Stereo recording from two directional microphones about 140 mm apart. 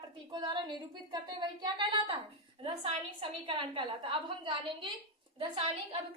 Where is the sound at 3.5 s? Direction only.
40° right (ahead or behind).